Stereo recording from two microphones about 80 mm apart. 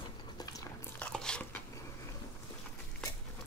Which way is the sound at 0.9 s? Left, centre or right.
Centre.